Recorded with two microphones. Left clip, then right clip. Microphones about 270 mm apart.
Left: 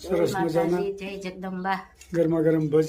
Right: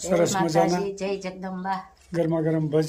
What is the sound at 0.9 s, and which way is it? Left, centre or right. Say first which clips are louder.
Speech: right 2 dB; right.